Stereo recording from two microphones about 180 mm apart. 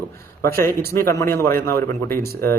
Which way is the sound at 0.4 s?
15° left (ahead or behind).